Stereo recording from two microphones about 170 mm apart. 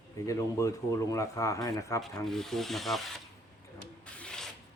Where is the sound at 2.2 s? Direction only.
Centre (ahead or behind).